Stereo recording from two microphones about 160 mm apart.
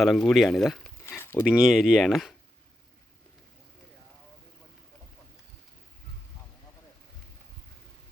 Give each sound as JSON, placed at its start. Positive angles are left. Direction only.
{"t": 0.0, "sound": "speech", "side_deg": 0}
{"t": 1.0, "sound": "a sound", "side_deg": 15}
{"t": 1.5, "sound": "speech", "side_deg": -5}